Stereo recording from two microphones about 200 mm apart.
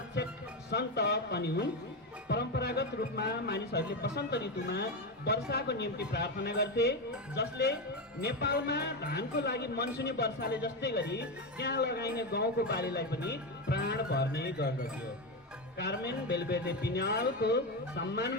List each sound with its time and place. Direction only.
0.7 s a man's voice: 55° left (ahead or behind)